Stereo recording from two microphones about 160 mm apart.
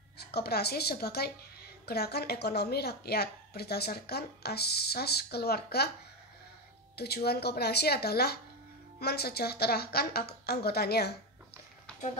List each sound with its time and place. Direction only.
0.2 s a woman's voice: 85° left
7.0 s a woman's voice: 80° left